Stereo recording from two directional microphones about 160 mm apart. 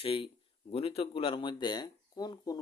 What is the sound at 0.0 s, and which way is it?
Speech, 35° left (ahead or behind).